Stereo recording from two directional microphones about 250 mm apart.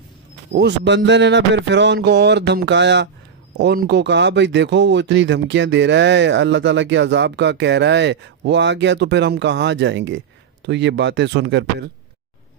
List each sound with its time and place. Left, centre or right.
0.6 s speech: right